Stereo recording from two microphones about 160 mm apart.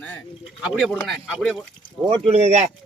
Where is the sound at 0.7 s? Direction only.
Centre (ahead or behind).